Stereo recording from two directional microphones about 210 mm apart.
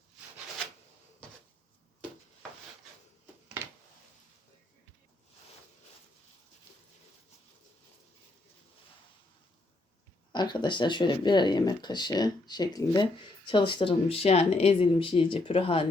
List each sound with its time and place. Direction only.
10.3 s speech: 20° left (ahead or behind)